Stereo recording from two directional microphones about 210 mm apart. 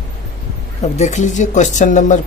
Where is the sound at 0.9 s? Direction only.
35° left (ahead or behind).